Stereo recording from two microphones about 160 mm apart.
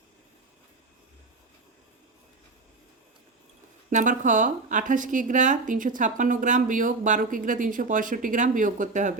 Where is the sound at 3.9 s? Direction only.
50° right (ahead or behind).